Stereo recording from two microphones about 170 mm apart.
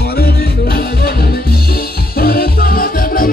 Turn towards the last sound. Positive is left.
turn(degrees=60)  # may be behind; listen again after turning